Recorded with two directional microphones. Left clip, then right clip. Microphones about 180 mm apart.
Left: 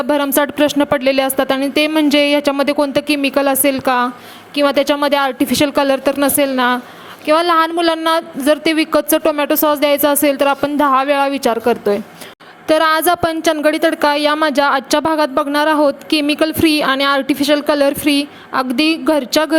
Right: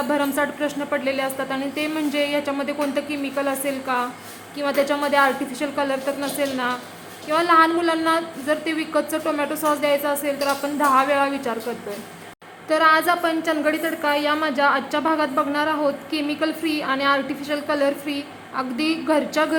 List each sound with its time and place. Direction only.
0.1 s a woman's voice: 55° left (ahead or behind)